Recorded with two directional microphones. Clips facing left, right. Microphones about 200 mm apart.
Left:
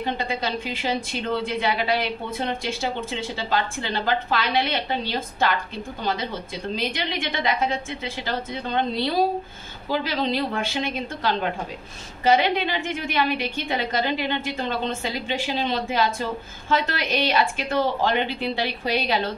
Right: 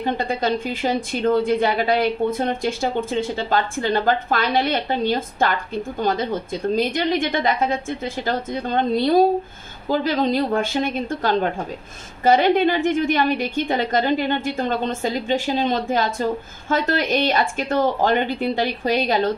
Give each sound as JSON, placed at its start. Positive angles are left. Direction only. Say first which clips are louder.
{"t": 0.0, "sound": "a woman's voice", "louder": "right 4 dB", "side_deg": -45}